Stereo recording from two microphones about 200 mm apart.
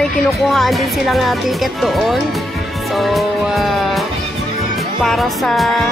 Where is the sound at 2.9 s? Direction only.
Centre (ahead or behind).